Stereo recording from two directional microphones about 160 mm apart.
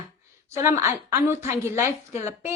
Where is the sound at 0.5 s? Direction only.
15° right (ahead or behind).